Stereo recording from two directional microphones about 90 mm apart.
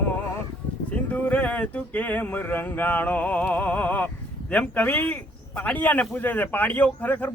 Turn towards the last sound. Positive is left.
turn(degrees=20)  # may be behind; listen again after turning